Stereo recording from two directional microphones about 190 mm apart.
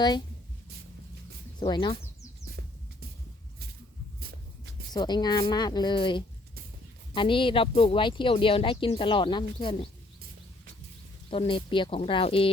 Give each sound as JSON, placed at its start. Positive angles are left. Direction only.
{"t": 1.5, "sound": "speech", "side_deg": 25}
{"t": 4.9, "sound": "speech", "side_deg": 20}
{"t": 11.3, "sound": "speech", "side_deg": 25}